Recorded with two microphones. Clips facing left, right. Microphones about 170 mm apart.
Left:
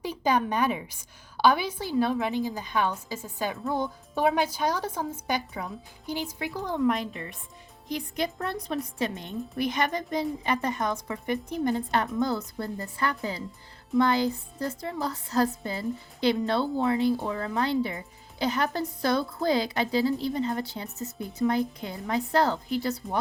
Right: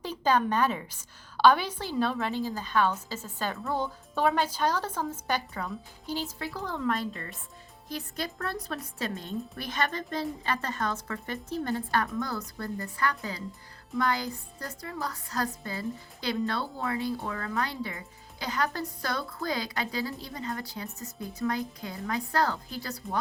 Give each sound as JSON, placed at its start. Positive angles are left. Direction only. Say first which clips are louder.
{"t": 0.0, "sound": "a woman's voice", "louder": "even", "side_deg": 10}